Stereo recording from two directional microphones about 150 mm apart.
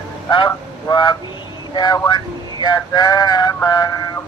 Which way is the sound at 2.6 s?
25° left (ahead or behind).